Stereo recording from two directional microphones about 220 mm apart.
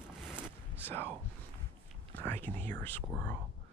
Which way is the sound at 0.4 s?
10° left (ahead or behind).